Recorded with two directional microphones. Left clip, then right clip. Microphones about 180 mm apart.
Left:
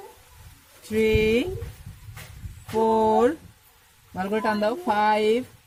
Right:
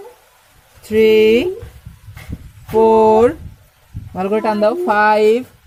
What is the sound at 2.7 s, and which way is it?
Speech, 20° right (ahead or behind).